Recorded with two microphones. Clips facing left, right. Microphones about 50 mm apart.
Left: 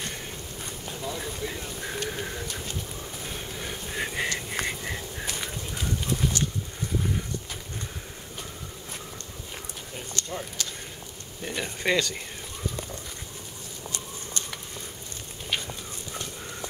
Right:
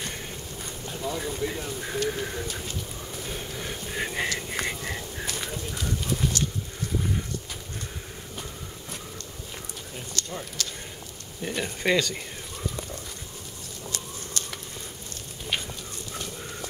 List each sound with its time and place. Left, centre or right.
1.0 s speech: centre
3.6 s a sound: centre
5.2 s clip-clop: centre
9.9 s a sound: centre
11.4 s speech: centre
13.8 s chicken: left